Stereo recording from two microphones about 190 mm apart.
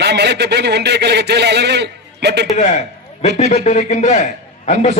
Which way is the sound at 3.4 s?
35° left (ahead or behind).